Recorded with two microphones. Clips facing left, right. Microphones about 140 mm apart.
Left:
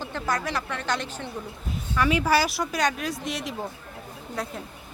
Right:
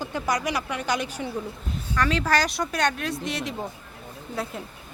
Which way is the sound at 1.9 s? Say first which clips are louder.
Left 1 dB; 10° left (ahead or behind).